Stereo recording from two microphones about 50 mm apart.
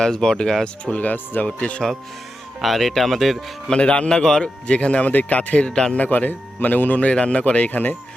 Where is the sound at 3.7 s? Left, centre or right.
Left.